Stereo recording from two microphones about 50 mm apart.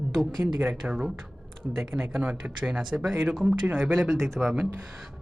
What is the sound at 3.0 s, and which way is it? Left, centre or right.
Speech, centre.